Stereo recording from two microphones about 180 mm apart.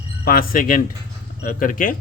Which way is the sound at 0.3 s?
55° left (ahead or behind).